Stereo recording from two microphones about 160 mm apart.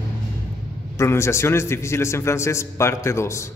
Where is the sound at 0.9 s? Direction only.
15° left (ahead or behind).